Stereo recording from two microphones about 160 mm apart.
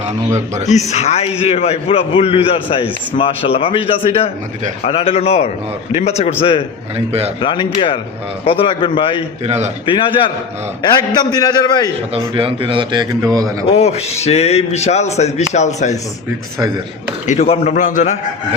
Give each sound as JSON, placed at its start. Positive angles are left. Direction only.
{"t": 0.7, "sound": "a man's voice", "side_deg": 45}
{"t": 6.9, "sound": "a man's voice", "side_deg": -40}
{"t": 7.4, "sound": "a man's voice", "side_deg": 30}
{"t": 9.4, "sound": "a man's voice", "side_deg": -45}
{"t": 9.8, "sound": "a man's voice", "side_deg": 30}
{"t": 12.1, "sound": "a man's voice", "side_deg": -35}
{"t": 13.7, "sound": "a man's voice", "side_deg": 40}
{"t": 17.2, "sound": "a man's voice", "side_deg": 40}